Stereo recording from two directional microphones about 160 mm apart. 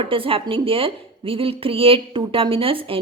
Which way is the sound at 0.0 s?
35° right (ahead or behind).